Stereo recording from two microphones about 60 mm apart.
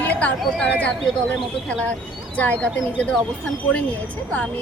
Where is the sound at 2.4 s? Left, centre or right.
Left.